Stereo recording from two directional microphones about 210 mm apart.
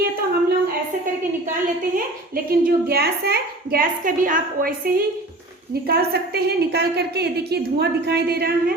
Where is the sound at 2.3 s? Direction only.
45° right (ahead or behind).